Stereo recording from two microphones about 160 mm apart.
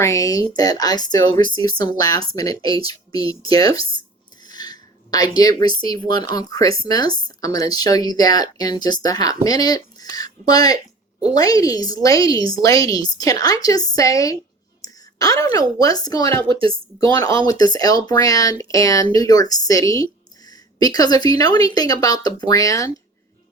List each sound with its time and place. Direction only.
0.0 s speech: 20° left (ahead or behind)
3.2 s speech: 35° right (ahead or behind)
3.5 s speech: 25° left (ahead or behind)
14.8 s a sound: 20° left (ahead or behind)
15.8 s speech: 25° left (ahead or behind)
17.4 s speech: 25° left (ahead or behind)